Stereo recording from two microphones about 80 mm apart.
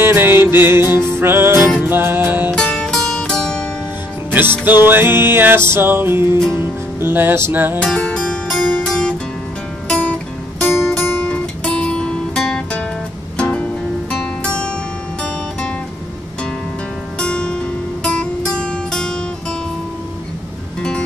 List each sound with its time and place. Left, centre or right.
0.0 s music: right
2.5 s music: centre
4.3 s music: right
7.8 s music: centre
10.7 s music: centre
11.2 s music: centre
17.2 s music: centre